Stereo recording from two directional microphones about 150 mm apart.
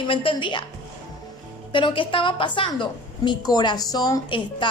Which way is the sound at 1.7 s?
35° left (ahead or behind).